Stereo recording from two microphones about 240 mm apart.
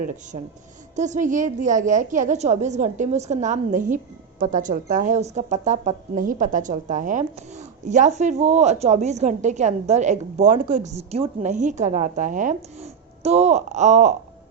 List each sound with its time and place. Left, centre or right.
0.3 s a woman's voice: right